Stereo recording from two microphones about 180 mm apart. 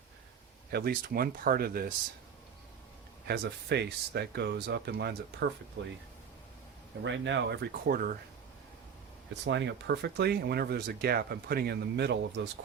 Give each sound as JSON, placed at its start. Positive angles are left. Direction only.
{"t": 0.7, "sound": "speech", "side_deg": -60}
{"t": 3.2, "sound": "speech", "side_deg": -65}
{"t": 7.0, "sound": "speech", "side_deg": -85}
{"t": 9.4, "sound": "speech", "side_deg": -75}